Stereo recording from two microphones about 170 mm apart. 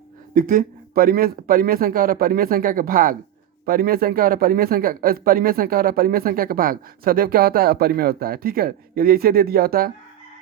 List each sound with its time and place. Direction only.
0.3 s speech: 55° right (ahead or behind)